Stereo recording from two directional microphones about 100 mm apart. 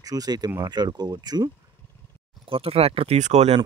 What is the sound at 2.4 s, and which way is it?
Speech, 70° right (ahead or behind).